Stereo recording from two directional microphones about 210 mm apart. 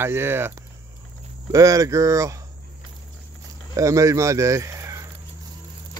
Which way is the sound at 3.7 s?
15° right (ahead or behind).